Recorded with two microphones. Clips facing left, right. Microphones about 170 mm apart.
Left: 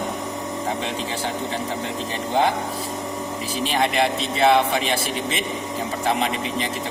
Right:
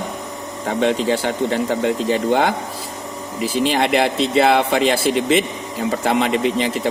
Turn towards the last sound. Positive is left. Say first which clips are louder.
# right 7 dB
turn(degrees=-80)